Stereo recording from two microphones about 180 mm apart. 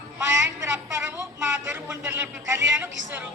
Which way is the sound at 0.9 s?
15° right (ahead or behind).